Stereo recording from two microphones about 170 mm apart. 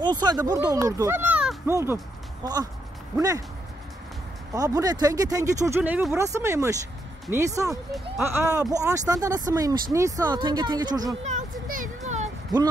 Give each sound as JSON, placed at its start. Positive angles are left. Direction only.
{"t": 0.0, "sound": "speech", "side_deg": -25}
{"t": 4.6, "sound": "speech", "side_deg": -20}
{"t": 6.1, "sound": "speech", "side_deg": -15}
{"t": 11.2, "sound": "a sound", "side_deg": -50}